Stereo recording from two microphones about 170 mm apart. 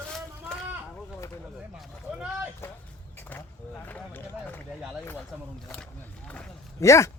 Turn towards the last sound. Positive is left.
turn(degrees=20)  # may be behind; listen again after turning